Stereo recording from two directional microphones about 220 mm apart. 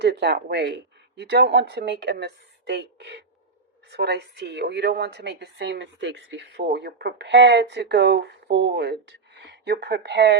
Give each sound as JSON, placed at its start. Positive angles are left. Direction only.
{"t": 0.0, "sound": "speech", "side_deg": -50}